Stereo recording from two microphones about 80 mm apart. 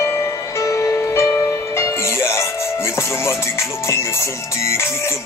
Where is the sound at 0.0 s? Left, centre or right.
Left.